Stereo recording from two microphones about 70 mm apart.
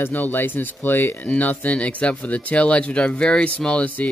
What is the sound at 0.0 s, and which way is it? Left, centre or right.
Speech, left.